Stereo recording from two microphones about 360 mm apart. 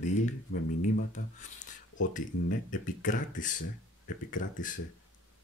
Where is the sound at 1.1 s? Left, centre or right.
Centre.